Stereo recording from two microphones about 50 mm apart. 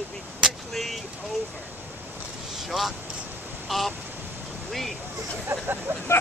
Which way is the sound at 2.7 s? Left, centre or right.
Centre.